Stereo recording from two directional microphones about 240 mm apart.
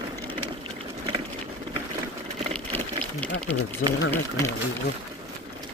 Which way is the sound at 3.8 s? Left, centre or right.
Left.